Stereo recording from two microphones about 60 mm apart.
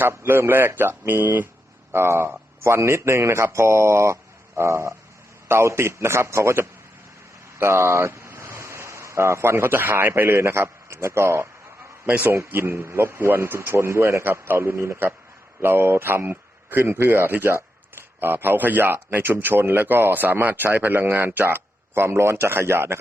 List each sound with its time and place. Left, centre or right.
0.0 s a man's voice: right
1.9 s speech: right
12.2 s a man's voice: right
16.3 s a sound: right
16.9 s a man's voice: right